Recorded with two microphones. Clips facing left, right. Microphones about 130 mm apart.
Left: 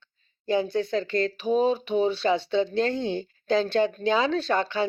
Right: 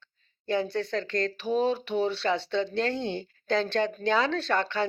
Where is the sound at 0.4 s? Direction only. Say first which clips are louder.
Left 3 dB; 10° left (ahead or behind).